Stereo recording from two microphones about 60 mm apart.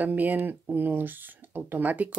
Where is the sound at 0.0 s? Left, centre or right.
Right.